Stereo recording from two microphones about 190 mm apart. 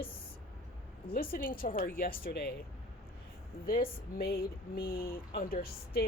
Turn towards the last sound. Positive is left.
turn(degrees=50)  # may be behind; listen again after turning